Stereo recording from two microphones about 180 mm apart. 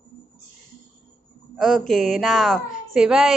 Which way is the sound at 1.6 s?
Centre (ahead or behind).